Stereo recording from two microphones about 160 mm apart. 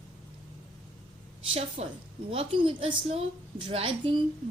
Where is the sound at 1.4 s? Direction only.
40° right (ahead or behind).